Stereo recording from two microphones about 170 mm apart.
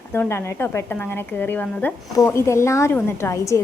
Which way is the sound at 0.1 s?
15° left (ahead or behind).